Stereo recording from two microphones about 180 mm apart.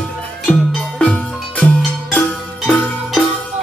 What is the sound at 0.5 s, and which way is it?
Music, 5° left (ahead or behind).